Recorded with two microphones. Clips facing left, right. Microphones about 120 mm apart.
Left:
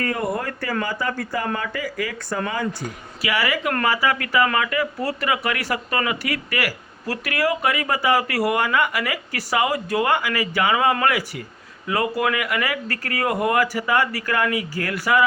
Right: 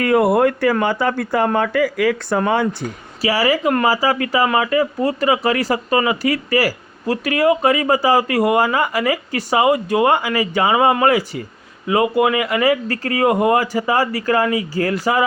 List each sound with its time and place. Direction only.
0.0 s speech: 65° right (ahead or behind)
3.2 s speech: 30° right (ahead or behind)